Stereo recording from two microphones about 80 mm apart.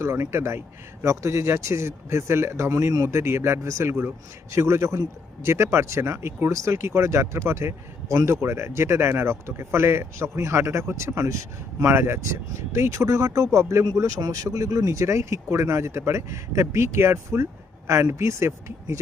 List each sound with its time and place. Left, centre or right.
0.0 s a man's voice: right